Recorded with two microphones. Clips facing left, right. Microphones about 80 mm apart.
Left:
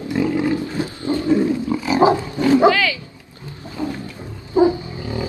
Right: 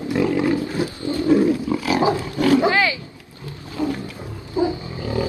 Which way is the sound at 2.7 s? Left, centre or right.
Right.